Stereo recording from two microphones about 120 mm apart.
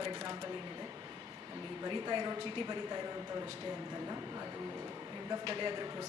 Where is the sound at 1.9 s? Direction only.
40° right (ahead or behind).